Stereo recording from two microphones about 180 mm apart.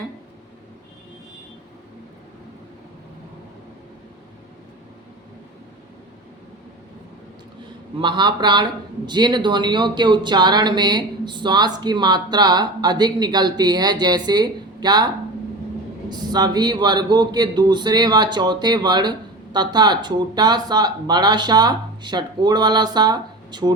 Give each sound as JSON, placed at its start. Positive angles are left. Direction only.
{"t": 7.9, "sound": "a man's voice", "side_deg": -25}